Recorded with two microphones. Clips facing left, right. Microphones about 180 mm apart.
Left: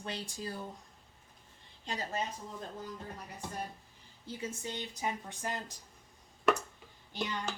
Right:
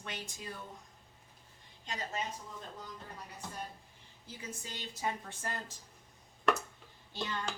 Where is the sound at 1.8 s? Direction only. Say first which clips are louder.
Left 3 dB; 30° left (ahead or behind).